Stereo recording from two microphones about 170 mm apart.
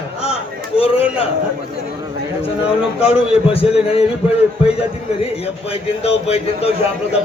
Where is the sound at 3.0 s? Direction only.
35° left (ahead or behind).